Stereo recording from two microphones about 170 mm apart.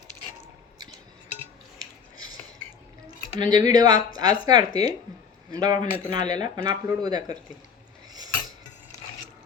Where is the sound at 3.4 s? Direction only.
25° right (ahead or behind).